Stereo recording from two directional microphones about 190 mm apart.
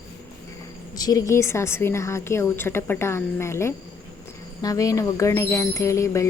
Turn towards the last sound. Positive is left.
turn(degrees=15)  # may be behind; listen again after turning